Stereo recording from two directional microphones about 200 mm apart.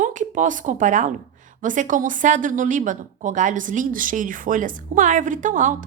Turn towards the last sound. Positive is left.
turn(degrees=-40)  # may be behind; listen again after turning